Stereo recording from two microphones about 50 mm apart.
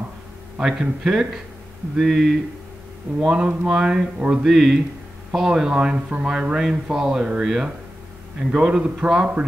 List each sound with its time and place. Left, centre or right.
0.6 s speech: centre
3.2 s speech: right